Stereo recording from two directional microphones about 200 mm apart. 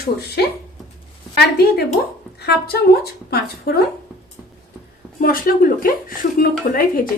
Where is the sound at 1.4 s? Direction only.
50° left (ahead or behind).